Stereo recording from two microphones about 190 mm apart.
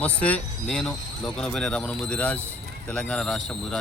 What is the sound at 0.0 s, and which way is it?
Speech, 10° left (ahead or behind).